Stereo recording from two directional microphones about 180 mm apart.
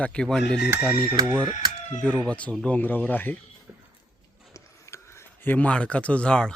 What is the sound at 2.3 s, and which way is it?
Speech, 5° left (ahead or behind).